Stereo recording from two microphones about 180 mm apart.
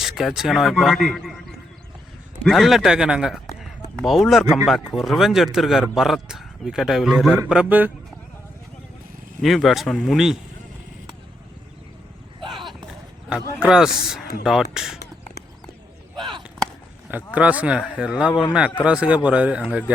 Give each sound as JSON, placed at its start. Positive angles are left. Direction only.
{"t": 0.0, "sound": "a man's voice", "side_deg": 0}
{"t": 9.4, "sound": "a man's voice", "side_deg": 0}
{"t": 13.6, "sound": "a man's voice", "side_deg": -5}
{"t": 16.2, "sound": "chop", "side_deg": -25}
{"t": 17.3, "sound": "a man's voice", "side_deg": -10}